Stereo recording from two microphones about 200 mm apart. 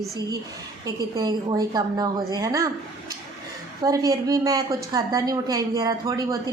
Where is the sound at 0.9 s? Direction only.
20° right (ahead or behind).